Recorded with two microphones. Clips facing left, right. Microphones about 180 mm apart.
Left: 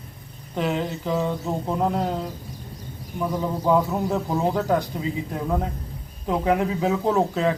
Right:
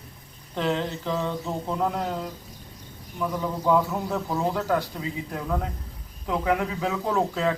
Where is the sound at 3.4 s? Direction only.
20° left (ahead or behind).